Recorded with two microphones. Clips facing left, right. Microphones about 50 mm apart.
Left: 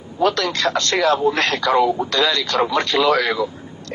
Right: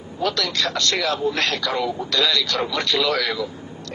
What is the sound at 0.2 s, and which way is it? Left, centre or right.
Speech, left.